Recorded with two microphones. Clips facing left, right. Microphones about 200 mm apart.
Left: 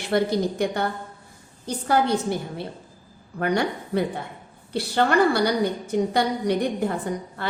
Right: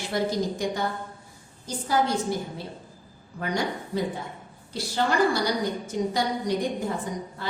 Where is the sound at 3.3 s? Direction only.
60° left (ahead or behind).